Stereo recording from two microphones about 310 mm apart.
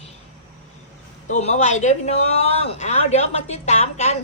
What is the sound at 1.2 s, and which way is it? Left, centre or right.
A woman's voice, left.